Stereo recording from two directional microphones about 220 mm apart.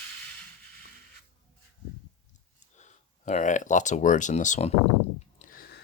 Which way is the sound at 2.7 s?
35° left (ahead or behind).